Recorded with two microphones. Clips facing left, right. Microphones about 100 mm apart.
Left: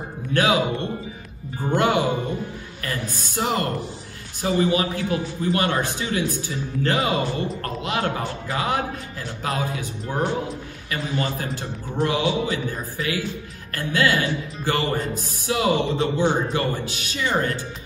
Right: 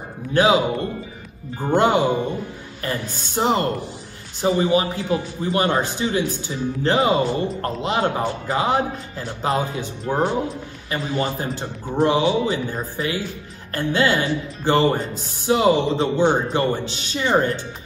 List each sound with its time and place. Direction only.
0.3 s a man's voice: 20° right (ahead or behind)
1.7 s a man's voice: 20° right (ahead or behind)